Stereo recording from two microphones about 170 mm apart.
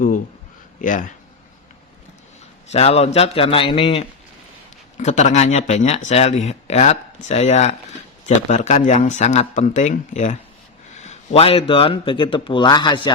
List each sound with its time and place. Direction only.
0.8 s speech: 50° left (ahead or behind)
2.6 s speech: 40° left (ahead or behind)
4.9 s speech: 45° left (ahead or behind); by 13.1 s 25° left (ahead or behind)